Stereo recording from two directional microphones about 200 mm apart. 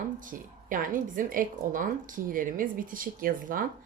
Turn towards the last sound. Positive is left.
turn(degrees=-45)  # may be behind; listen again after turning